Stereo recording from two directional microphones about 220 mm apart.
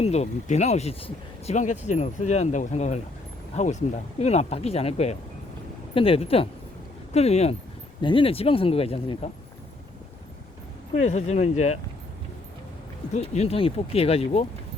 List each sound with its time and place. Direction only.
0.0 s speech: 30° left (ahead or behind)
11.0 s speech: 30° left (ahead or behind)
13.3 s speech: 30° left (ahead or behind)